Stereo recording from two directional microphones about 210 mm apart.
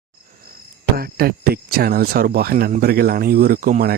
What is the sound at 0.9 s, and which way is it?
Speech, 45° right (ahead or behind).